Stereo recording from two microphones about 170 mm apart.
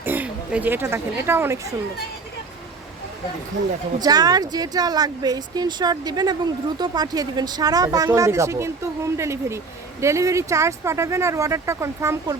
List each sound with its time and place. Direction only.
0.0 s speech: 10° right (ahead or behind)
4.0 s speech: 20° right (ahead or behind)